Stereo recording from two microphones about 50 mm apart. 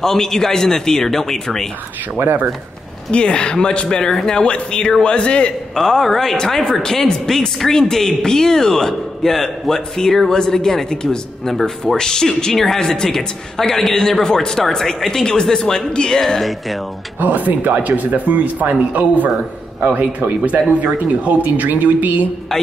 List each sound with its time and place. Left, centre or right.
0.0 s speech: centre
3.1 s a man's voice: centre
5.8 s speech: centre
17.2 s speech: right